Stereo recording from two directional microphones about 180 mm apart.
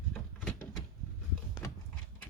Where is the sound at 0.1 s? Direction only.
10° left (ahead or behind).